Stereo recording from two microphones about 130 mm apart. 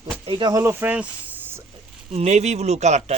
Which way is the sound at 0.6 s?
15° right (ahead or behind).